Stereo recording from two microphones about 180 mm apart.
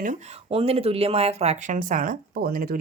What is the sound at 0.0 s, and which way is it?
Speech, 45° right (ahead or behind).